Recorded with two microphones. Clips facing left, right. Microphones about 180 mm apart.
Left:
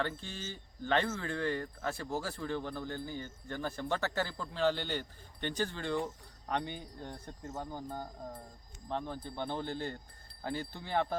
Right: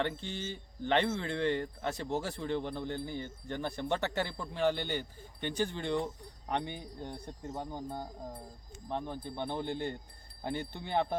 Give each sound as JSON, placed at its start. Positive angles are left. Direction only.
{"t": 0.0, "sound": "speech", "side_deg": -20}